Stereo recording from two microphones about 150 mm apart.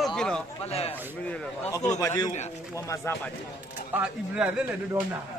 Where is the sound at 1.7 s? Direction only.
20° left (ahead or behind).